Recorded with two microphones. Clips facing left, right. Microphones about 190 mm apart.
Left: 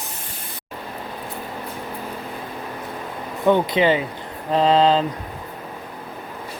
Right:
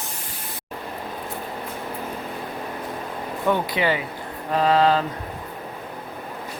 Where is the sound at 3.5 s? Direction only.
20° left (ahead or behind).